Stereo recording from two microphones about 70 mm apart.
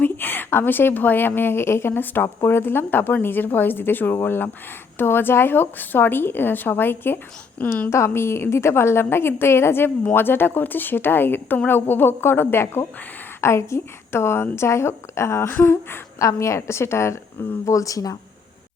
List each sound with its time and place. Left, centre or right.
0.0 s a woman's voice: left
7.9 s a woman's voice: left
16.1 s a woman's voice: left
17.7 s speech: left